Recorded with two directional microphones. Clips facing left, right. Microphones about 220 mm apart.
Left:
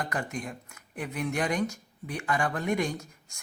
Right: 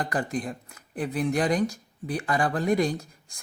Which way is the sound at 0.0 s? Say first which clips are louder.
Right 5 dB; 35° right (ahead or behind).